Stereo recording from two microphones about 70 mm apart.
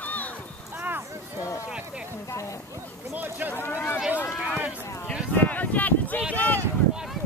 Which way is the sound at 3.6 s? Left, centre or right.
Left.